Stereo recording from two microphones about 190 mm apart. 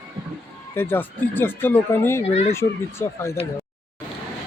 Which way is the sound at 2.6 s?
15° left (ahead or behind).